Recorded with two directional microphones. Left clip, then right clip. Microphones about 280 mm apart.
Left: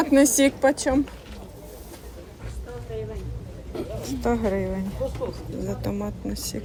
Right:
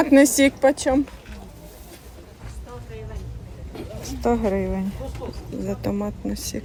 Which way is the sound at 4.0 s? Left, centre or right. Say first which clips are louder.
Right 3 dB; right.